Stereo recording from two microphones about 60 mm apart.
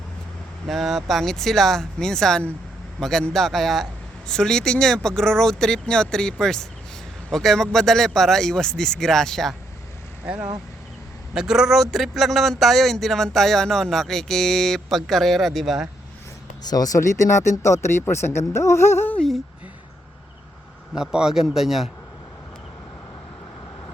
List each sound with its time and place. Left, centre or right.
0.7 s speech: centre
11.3 s speech: centre
16.7 s speech: left
20.9 s speech: centre